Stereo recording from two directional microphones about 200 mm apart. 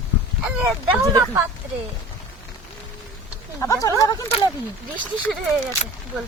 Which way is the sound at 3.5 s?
15° left (ahead or behind).